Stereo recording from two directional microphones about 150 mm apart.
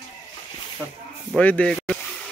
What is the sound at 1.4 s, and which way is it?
Speech, 10° left (ahead or behind).